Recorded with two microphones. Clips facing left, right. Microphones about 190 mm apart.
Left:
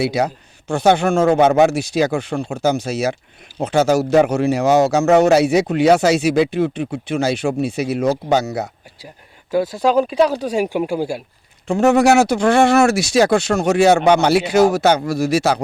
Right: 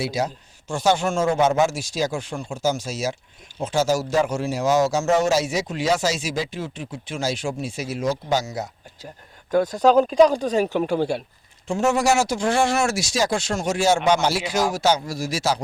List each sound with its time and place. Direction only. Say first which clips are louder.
0.0 s speech: left 6 dB; 65° left (ahead or behind)
9.5 s speech: even; 10° left (ahead or behind)
11.7 s speech: left 7 dB; 60° left (ahead or behind)